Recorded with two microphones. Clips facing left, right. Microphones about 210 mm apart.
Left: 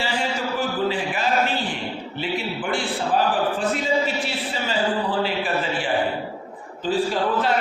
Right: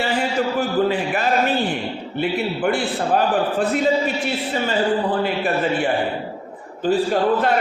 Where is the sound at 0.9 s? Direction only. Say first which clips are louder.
Right 3 dB; 55° right (ahead or behind).